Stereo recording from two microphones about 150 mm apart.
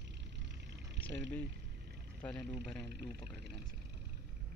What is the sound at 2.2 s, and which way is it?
Speech, 5° left (ahead or behind).